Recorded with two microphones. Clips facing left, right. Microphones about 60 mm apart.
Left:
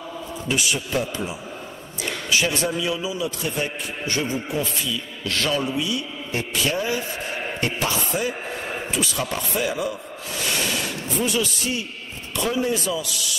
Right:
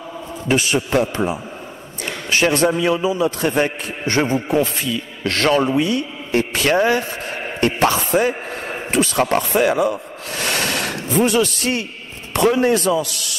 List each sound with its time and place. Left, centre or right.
0.5 s a man's voice: right